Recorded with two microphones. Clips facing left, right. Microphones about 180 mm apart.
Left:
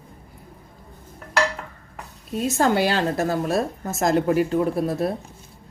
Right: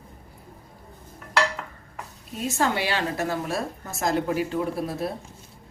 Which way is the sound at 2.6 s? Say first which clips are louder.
Left 5 dB; 40° left (ahead or behind).